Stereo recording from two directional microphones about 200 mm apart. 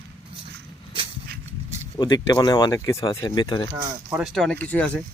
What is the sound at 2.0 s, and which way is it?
Speech, 20° left (ahead or behind).